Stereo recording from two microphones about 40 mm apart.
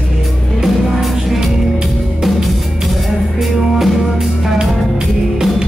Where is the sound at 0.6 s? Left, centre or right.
Centre.